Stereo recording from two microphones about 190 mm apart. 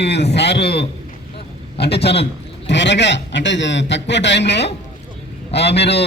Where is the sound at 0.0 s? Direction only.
65° left (ahead or behind).